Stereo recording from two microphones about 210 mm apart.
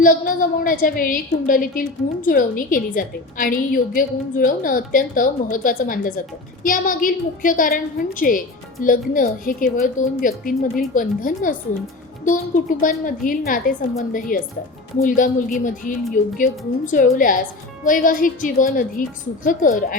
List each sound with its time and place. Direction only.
0.0 s a woman's voice: 40° left (ahead or behind)